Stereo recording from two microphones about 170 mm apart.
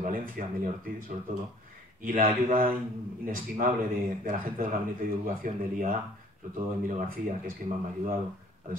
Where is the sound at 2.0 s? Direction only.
55° right (ahead or behind).